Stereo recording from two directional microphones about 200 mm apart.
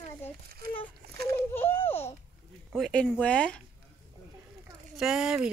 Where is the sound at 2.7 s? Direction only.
5° left (ahead or behind).